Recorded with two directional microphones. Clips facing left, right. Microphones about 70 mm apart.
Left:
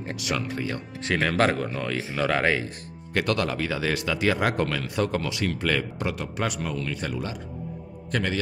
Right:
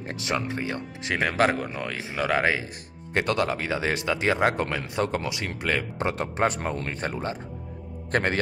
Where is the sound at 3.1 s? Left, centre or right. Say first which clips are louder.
Right 1 dB; right.